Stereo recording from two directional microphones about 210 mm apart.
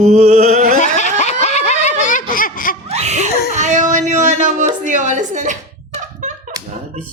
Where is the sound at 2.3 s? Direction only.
40° left (ahead or behind).